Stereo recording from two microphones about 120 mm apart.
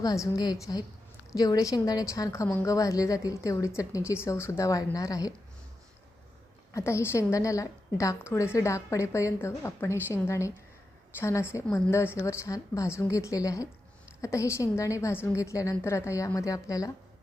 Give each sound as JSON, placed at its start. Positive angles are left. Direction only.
{"t": 0.0, "sound": "a woman's voice", "side_deg": 30}
{"t": 6.7, "sound": "a woman's voice", "side_deg": 25}